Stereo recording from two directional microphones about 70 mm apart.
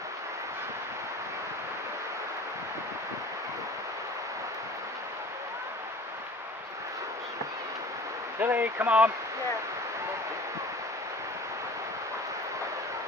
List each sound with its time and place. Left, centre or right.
8.4 s speech: right